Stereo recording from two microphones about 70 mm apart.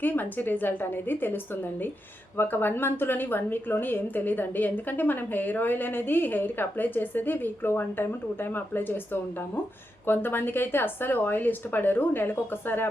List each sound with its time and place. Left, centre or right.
0.0 s a woman's voice: left
2.4 s a woman's voice: left
10.1 s a woman's voice: left